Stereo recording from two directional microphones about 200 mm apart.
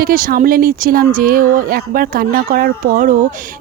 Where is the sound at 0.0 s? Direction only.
45° right (ahead or behind).